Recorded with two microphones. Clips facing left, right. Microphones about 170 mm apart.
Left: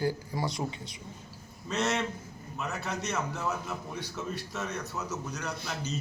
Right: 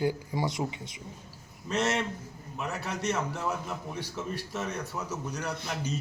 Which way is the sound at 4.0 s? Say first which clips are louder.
Right 1 dB; 10° right (ahead or behind).